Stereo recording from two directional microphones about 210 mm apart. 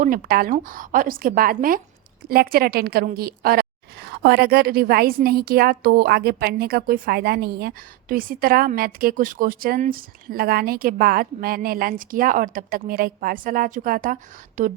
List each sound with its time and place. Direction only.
0.0 s a woman's voice: 45° right (ahead or behind)